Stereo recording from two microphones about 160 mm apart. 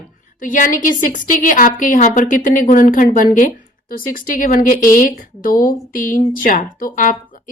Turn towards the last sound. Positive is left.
turn(degrees=55)  # may be behind; listen again after turning